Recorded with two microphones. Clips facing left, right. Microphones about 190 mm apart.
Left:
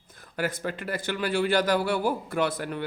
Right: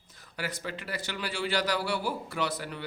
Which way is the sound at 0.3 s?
50° left (ahead or behind).